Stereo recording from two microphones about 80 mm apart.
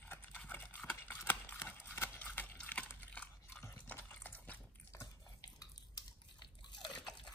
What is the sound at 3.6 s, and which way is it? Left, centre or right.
Liquid, left.